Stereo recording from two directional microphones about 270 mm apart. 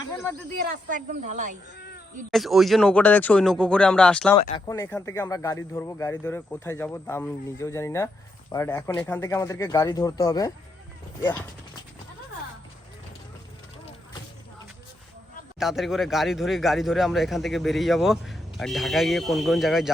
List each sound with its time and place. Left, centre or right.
0.6 s a woman's voice: right
2.3 s speech: centre
4.4 s speech: centre
15.5 s speech: centre